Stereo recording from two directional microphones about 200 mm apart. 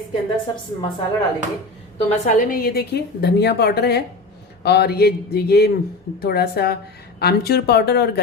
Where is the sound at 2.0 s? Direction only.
40° left (ahead or behind).